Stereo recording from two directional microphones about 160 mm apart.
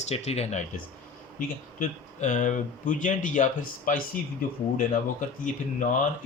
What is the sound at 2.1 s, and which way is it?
Speech, 50° left (ahead or behind).